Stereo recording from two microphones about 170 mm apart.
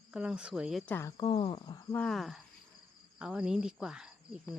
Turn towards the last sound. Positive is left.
turn(degrees=-5)  # may be behind; listen again after turning